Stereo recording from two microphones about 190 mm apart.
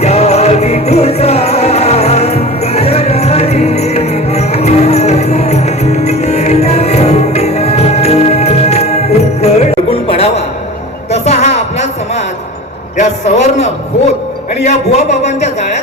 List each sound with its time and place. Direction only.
0.0 s music: 35° left (ahead or behind)
11.1 s a sound: 35° left (ahead or behind)
14.6 s a man's voice: 35° left (ahead or behind)